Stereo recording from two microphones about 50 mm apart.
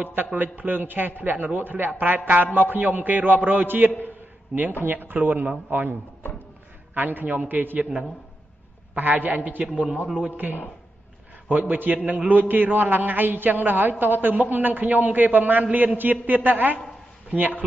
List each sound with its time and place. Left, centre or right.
0.0 s a man's voice: right
7.8 s a man's voice: right
8.9 s a man's voice: right
11.4 s a man's voice: right